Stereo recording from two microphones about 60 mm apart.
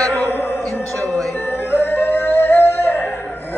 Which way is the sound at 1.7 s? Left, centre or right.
Left.